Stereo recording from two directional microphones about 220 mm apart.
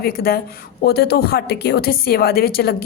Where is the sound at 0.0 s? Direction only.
45° left (ahead or behind).